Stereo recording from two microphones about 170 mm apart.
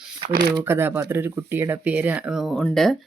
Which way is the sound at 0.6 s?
15° right (ahead or behind).